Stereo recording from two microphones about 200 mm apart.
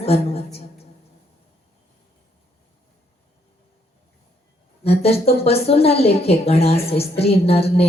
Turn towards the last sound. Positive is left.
turn(degrees=30)  # may be behind; listen again after turning